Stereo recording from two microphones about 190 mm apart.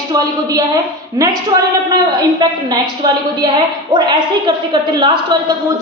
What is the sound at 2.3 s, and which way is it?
A woman's voice, 20° right (ahead or behind).